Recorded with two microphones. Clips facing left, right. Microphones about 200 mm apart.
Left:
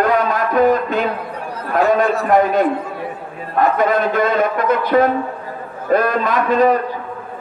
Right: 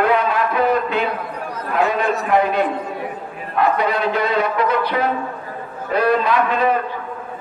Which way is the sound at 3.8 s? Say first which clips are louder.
Left 4 dB; 45° left (ahead or behind).